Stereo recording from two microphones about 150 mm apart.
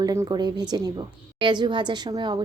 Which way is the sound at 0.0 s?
25° right (ahead or behind).